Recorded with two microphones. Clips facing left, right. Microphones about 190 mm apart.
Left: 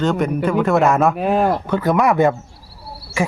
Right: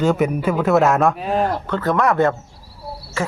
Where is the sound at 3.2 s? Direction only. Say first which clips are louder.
Left 3 dB; 15° left (ahead or behind).